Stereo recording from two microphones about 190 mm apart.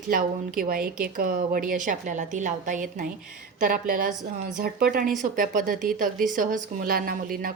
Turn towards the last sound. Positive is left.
turn(degrees=-50)  # may be behind; listen again after turning